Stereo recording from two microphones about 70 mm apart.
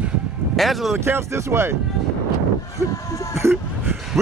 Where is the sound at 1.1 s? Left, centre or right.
Right.